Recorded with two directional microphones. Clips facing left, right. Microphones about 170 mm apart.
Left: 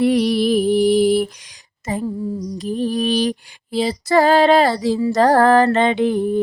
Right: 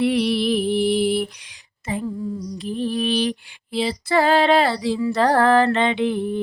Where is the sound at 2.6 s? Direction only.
40° left (ahead or behind).